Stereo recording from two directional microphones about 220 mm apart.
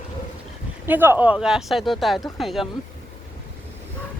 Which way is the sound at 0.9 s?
10° right (ahead or behind).